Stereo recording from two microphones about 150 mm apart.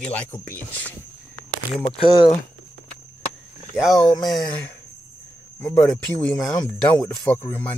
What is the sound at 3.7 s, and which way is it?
Speech, centre (ahead or behind).